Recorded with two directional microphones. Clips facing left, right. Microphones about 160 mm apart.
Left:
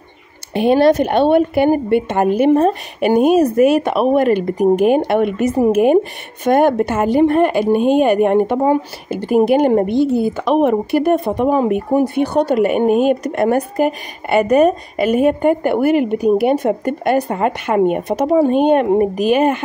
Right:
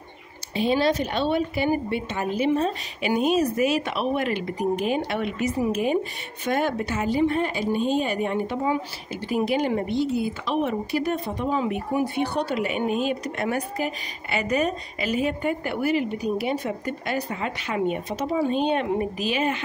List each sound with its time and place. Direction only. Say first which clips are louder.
0.5 s speech: left 10 dB; 60° left (ahead or behind)